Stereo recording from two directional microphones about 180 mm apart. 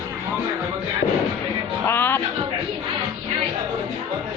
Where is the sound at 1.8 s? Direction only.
10° left (ahead or behind).